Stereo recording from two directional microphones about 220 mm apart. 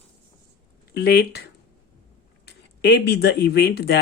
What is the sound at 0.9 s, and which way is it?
Speech, 45° left (ahead or behind).